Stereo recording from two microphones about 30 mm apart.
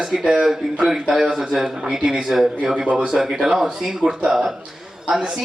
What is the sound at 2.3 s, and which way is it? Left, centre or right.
A man's voice, right.